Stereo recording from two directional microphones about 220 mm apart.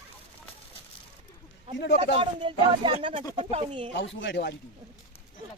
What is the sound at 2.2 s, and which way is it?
Speech, 25° right (ahead or behind).